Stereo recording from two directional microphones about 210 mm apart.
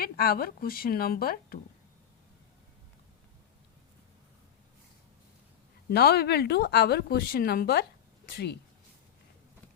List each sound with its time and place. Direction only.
0.0 s speech: 45° left (ahead or behind)
5.9 s speech: 50° left (ahead or behind)